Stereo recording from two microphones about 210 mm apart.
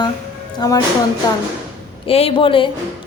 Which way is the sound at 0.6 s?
20° left (ahead or behind).